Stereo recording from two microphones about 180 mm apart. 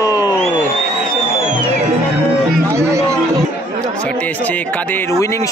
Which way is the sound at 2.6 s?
15° right (ahead or behind).